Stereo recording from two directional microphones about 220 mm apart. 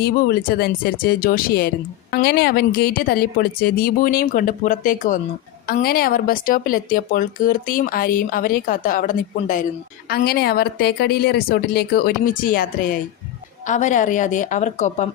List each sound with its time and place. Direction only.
0.0 s speech: 45° left (ahead or behind)